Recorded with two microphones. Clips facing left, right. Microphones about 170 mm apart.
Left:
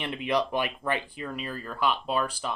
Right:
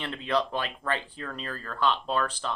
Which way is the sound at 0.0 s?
15° left (ahead or behind).